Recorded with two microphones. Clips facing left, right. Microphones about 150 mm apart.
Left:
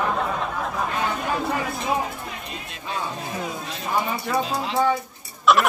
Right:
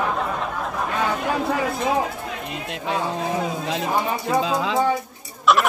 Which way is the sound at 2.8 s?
85° right.